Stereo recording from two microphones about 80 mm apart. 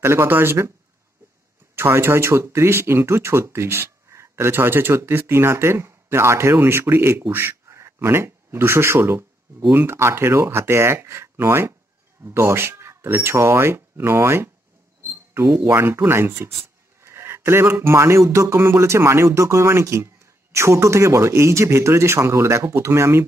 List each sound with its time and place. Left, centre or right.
0.0 s speech: right
1.8 s speech: right